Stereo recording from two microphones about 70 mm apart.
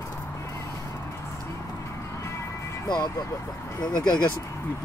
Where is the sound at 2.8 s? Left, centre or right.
Left.